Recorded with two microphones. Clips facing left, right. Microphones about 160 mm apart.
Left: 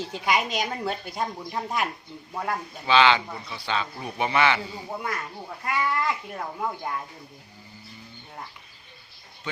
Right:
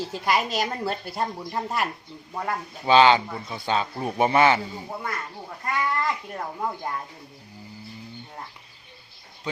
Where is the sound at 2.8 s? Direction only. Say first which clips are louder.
Right 3 dB; 40° right (ahead or behind).